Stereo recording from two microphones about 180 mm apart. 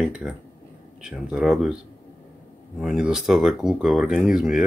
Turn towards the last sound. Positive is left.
turn(degrees=0)  # may be behind; listen again after turning